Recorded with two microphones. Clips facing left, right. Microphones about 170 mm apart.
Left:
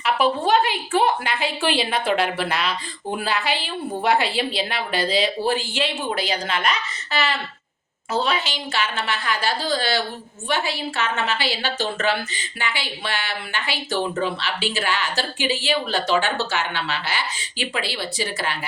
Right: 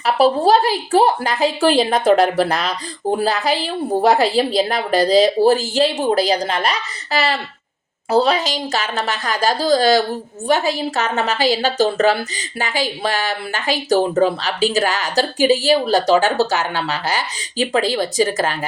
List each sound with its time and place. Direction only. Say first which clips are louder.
0.0 s a woman's voice: right 6 dB; 35° right (ahead or behind)